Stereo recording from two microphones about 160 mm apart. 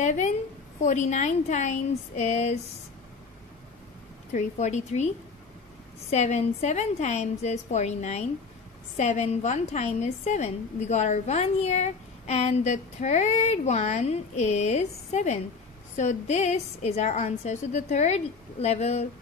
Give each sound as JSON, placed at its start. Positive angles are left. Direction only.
{"t": 0.0, "sound": "a woman's voice", "side_deg": 50}
{"t": 4.3, "sound": "a woman's voice", "side_deg": 45}